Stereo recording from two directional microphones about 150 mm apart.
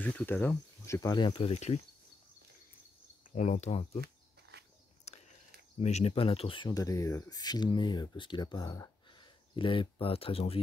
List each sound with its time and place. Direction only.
0.0 s speech: 10° left (ahead or behind)
1.1 s speech: 35° left (ahead or behind)
3.3 s speech: 55° left (ahead or behind)
4.0 s a sound: 90° right
5.1 s a sound: 45° left (ahead or behind)
5.8 s speech: 45° left (ahead or behind)